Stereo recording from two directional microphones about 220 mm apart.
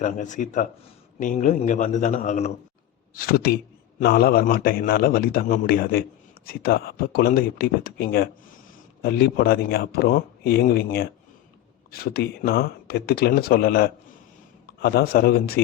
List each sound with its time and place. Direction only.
0.0 s a man's voice: 35° left (ahead or behind)